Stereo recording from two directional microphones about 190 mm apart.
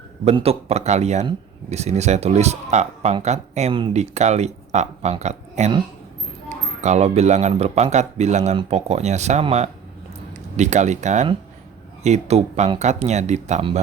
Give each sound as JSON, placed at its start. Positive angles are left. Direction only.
{"t": 0.3, "sound": "speech", "side_deg": -30}